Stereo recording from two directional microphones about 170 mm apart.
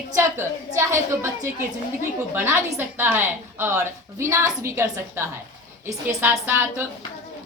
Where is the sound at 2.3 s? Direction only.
15° right (ahead or behind).